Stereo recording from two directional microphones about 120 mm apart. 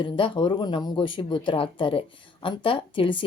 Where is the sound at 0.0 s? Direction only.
45° left (ahead or behind).